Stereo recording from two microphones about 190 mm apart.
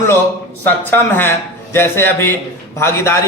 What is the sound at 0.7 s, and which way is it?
A man's voice, 10° left (ahead or behind).